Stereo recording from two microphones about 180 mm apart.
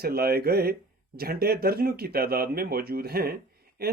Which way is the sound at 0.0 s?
60° right (ahead or behind).